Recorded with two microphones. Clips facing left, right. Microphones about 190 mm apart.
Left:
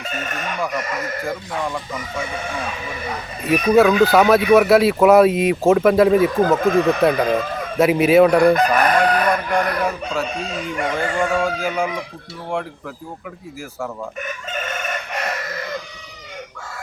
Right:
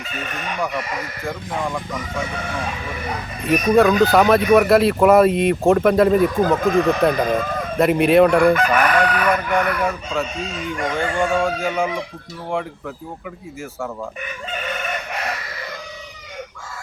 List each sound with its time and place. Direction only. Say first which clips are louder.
1.2 s speech: left 1 dB; centre (ahead or behind)
3.4 s speech: left 1 dB; centre (ahead or behind)
8.4 s chicken: left 1 dB; 35° left (ahead or behind)
10.7 s speech: even; centre (ahead or behind)